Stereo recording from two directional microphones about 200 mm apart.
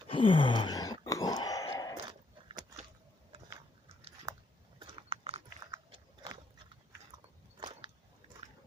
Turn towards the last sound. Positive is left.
turn(degrees=-25)  # may be behind; listen again after turning